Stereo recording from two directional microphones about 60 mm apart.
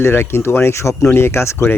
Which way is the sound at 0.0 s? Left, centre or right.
Left.